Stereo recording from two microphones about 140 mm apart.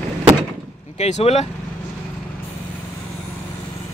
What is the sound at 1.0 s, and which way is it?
Speech, 50° left (ahead or behind).